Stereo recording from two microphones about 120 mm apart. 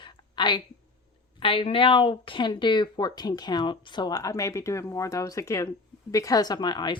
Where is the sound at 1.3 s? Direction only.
50° left (ahead or behind).